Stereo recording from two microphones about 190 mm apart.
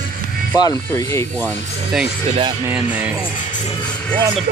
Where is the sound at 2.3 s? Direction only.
25° right (ahead or behind).